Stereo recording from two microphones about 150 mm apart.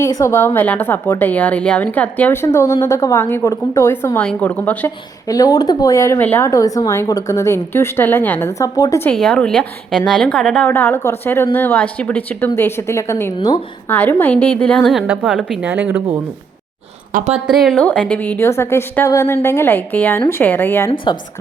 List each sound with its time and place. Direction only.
0.0 s a woman's voice: 20° left (ahead or behind)
5.3 s speech: 25° left (ahead or behind)
9.0 s a woman's voice: 5° left (ahead or behind); by 16.0 s 10° right (ahead or behind)
17.1 s speech: 60° right (ahead or behind)
17.4 s a woman's voice: centre (ahead or behind); by 20.9 s 15° left (ahead or behind)